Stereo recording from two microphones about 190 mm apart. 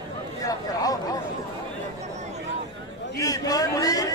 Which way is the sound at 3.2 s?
20° left (ahead or behind).